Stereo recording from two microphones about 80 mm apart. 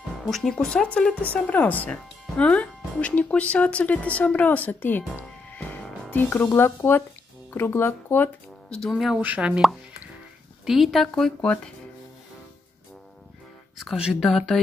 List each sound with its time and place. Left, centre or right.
0.2 s speech: centre; by 5.2 s left
5.5 s music: left
6.0 s speech: left
8.9 s a woman's voice: centre
9.2 s speech: centre
10.6 s a woman's voice: centre
14.2 s a woman's voice: centre